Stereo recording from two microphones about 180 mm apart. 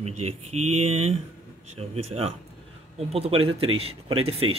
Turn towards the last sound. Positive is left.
turn(degrees=-30)  # may be behind; listen again after turning